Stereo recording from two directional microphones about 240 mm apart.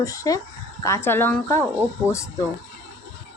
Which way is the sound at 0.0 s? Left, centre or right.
Centre.